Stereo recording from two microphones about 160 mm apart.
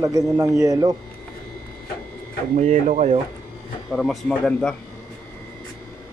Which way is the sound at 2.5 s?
50° right (ahead or behind).